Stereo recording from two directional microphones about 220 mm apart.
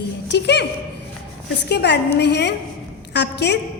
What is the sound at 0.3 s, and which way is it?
Speech, 50° left (ahead or behind).